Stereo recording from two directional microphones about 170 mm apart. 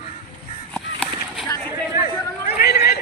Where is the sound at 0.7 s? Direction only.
5° left (ahead or behind).